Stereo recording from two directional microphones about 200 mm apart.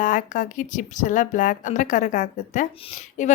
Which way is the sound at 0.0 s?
40° left (ahead or behind).